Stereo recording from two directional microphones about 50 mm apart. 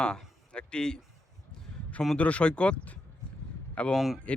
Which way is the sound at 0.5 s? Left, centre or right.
Centre.